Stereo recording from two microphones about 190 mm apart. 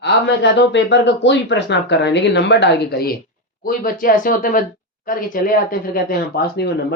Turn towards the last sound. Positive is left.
turn(degrees=55)  # may be behind; listen again after turning